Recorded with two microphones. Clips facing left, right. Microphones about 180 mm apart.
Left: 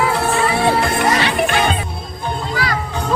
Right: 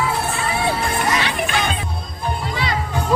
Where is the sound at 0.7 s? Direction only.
70° left (ahead or behind).